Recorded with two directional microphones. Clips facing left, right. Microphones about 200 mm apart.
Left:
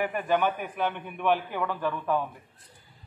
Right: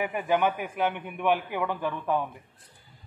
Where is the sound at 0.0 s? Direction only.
10° right (ahead or behind).